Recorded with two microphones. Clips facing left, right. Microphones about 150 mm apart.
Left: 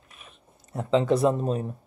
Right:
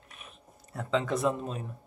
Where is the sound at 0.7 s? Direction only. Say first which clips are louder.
Left 7 dB; 25° left (ahead or behind).